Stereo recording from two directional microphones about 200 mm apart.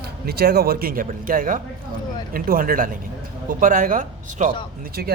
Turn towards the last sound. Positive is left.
turn(degrees=-40)  # may be behind; listen again after turning